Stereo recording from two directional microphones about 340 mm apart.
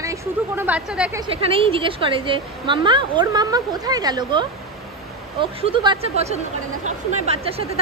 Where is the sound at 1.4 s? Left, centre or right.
Centre.